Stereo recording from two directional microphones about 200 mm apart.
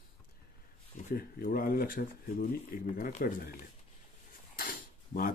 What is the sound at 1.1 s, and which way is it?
Speech, 45° left (ahead or behind).